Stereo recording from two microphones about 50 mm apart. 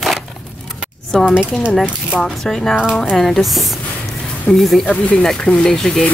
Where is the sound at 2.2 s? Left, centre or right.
Centre.